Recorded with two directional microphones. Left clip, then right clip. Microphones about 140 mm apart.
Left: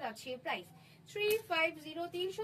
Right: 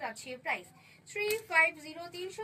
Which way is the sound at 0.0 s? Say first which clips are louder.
Right 2 dB; 25° left (ahead or behind).